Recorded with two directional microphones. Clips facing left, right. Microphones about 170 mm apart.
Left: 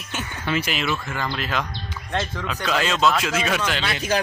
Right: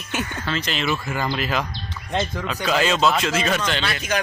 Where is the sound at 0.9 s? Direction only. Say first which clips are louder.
Right 2 dB; 10° right (ahead or behind).